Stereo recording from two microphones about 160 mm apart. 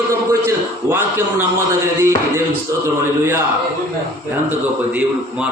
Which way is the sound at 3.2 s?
15° right (ahead or behind).